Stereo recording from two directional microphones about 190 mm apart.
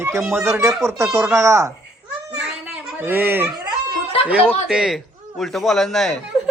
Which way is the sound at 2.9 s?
10° right (ahead or behind).